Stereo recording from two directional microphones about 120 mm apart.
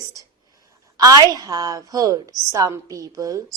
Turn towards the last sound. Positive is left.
turn(degrees=-30)  # may be behind; listen again after turning